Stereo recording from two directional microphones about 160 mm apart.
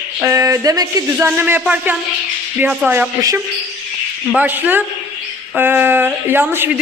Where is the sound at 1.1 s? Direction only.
10° right (ahead or behind).